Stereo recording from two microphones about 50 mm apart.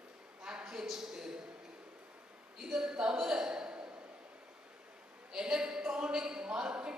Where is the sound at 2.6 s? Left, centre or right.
Centre.